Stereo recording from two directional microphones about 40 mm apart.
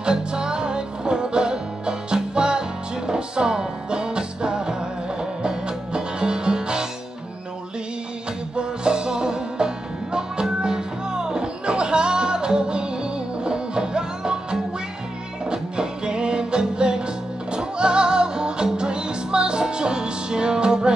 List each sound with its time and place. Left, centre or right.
0.0 s music: right
8.5 s music: right